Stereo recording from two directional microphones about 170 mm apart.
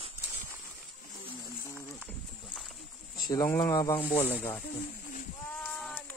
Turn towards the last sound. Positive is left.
turn(degrees=10)  # may be behind; listen again after turning